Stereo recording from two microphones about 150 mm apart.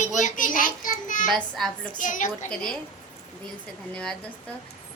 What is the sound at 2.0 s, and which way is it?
Speech, 60° left (ahead or behind).